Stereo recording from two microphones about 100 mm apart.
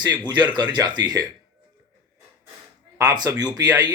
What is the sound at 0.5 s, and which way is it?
Speech, 45° right (ahead or behind).